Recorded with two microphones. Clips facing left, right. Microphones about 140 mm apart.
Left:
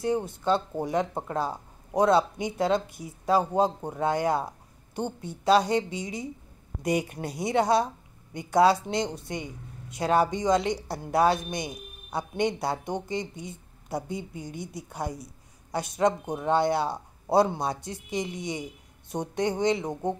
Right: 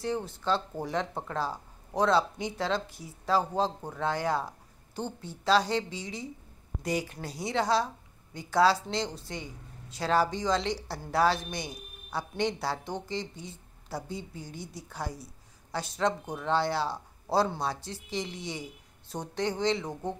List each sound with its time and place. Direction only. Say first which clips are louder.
0.0 s speech: left 5 dB; 15° left (ahead or behind)